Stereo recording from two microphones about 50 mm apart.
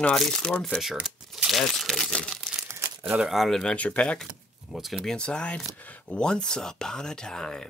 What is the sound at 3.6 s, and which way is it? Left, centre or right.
Speech, left.